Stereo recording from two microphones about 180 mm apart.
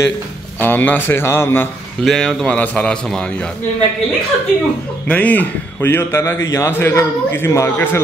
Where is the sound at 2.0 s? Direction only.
Centre (ahead or behind).